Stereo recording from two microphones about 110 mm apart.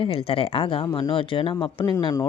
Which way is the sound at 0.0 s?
60° left (ahead or behind).